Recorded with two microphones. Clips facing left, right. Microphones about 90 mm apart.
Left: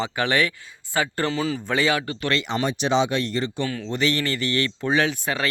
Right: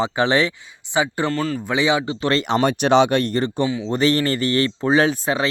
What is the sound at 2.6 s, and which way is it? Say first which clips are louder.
Speech: right 6 dB; 60° right (ahead or behind).